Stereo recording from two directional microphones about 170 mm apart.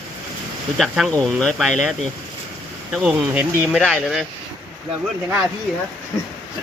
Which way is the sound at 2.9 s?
5° right (ahead or behind).